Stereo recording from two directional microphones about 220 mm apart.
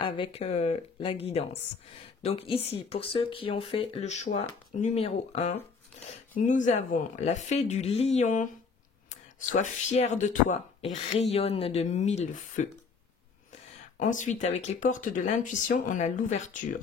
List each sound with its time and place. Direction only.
0.0 s speech: 25° left (ahead or behind)